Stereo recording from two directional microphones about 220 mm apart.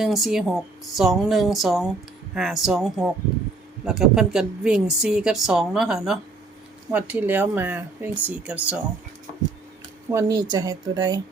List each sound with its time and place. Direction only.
0.0 s speech: centre (ahead or behind)
10.1 s speech: 15° right (ahead or behind)